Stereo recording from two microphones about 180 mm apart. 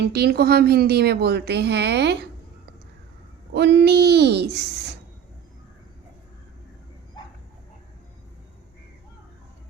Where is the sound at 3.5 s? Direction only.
70° right (ahead or behind).